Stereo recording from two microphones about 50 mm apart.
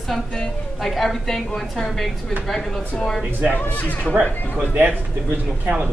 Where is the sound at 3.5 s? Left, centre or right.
Left.